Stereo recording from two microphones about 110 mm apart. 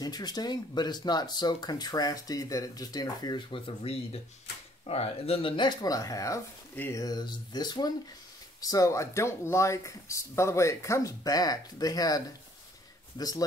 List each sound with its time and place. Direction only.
0.0 s speech: 40° left (ahead or behind)
6.7 s speech: 20° left (ahead or behind)
7.0 s speech: 35° left (ahead or behind)